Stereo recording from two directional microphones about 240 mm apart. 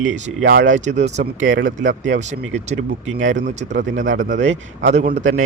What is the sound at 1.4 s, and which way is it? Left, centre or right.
Speech, right.